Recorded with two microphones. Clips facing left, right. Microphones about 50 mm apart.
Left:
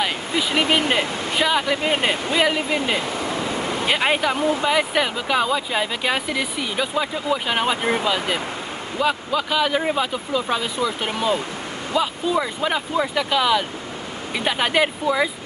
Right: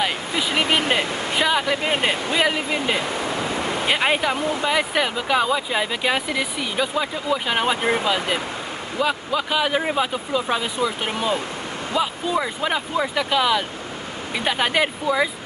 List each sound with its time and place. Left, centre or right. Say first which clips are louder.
0.0 s speech: even; centre
3.3 s vehicle: even; right
3.8 s speech: left 1 dB; centre